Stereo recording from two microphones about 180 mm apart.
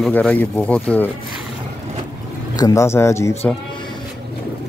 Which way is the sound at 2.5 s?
20° left (ahead or behind).